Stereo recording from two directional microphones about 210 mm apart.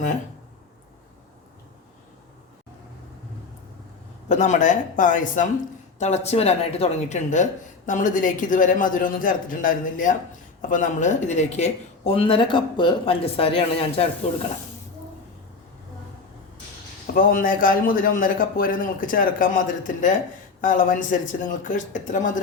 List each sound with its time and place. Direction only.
4.3 s a man's voice: 35° left (ahead or behind)
17.2 s a man's voice: 40° left (ahead or behind)